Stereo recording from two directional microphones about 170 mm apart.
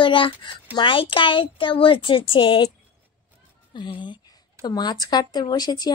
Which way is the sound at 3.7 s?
30° left (ahead or behind).